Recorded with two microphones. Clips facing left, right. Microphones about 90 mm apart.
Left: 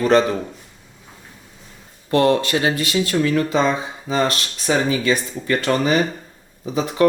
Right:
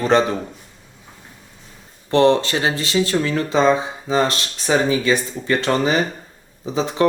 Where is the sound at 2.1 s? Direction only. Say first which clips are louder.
Right 2 dB; 30° right (ahead or behind).